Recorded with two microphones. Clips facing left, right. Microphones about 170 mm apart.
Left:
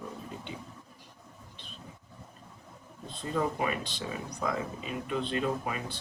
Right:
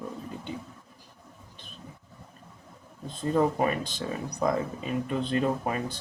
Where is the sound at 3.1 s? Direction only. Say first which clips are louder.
Right 6 dB; 45° right (ahead or behind).